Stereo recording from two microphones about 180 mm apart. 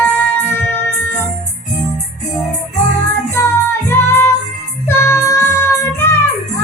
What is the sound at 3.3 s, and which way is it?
Music, 15° left (ahead or behind).